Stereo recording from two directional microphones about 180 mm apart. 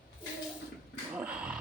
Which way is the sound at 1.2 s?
5° right (ahead or behind).